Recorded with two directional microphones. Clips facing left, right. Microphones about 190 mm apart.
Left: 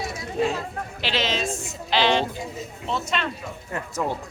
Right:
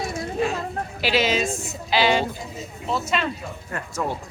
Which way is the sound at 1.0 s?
10° right (ahead or behind).